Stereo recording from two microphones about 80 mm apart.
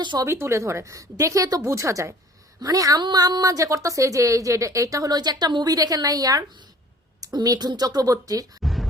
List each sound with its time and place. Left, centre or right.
0.3 s a woman's voice: right
3.0 s a woman's voice: right
8.6 s a sound: centre